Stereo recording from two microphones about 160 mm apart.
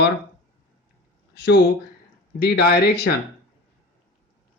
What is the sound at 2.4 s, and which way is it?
Speech, 75° left (ahead or behind).